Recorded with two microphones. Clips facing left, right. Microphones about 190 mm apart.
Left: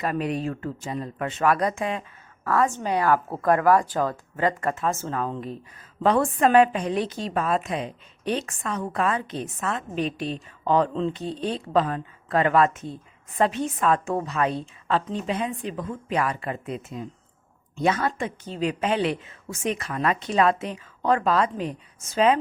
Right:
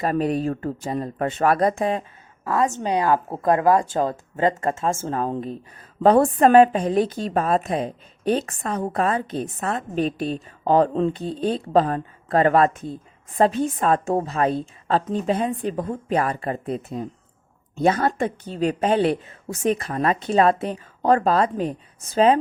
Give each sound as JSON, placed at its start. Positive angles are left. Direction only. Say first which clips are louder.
{"t": 0.0, "sound": "a woman's voice", "louder": "right 4 dB", "side_deg": -35}
{"t": 2.4, "sound": "a woman's voice", "louder": "right 1 dB", "side_deg": -15}